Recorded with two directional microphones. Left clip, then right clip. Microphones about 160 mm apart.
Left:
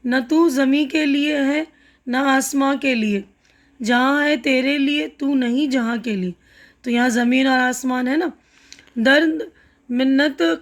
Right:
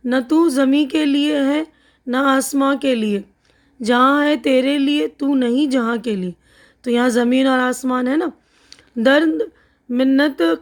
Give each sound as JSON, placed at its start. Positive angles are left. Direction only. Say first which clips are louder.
{"t": 0.0, "sound": "speech", "louder": "right 1 dB", "side_deg": -35}